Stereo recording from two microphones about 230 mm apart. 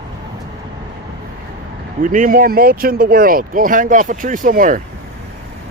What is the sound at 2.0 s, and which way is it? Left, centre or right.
Speech, right.